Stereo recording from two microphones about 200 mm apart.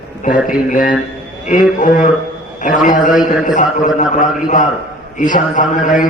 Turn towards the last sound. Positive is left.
turn(degrees=40)  # may be behind; listen again after turning